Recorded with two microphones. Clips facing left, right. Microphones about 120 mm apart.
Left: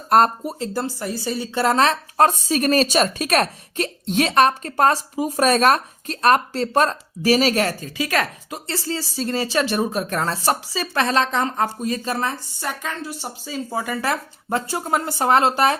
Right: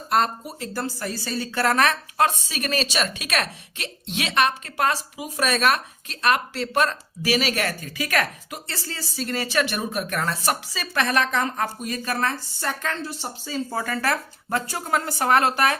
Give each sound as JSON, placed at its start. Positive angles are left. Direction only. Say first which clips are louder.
{"t": 0.1, "sound": "speech", "louder": "left 6 dB", "side_deg": 45}
{"t": 0.6, "sound": "speech", "louder": "left 2 dB", "side_deg": 25}
{"t": 2.1, "sound": "speech", "louder": "left 5 dB", "side_deg": 40}